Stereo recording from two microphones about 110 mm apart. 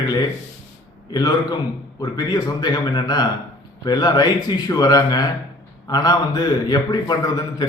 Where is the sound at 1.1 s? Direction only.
35° left (ahead or behind).